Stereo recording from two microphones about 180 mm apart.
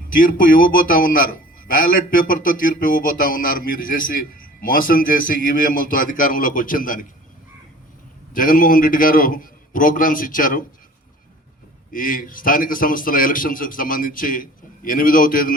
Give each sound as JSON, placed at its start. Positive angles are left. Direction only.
{"t": 0.1, "sound": "a man's voice", "side_deg": 50}
{"t": 8.3, "sound": "a man's voice", "side_deg": 50}
{"t": 11.9, "sound": "a man's voice", "side_deg": 50}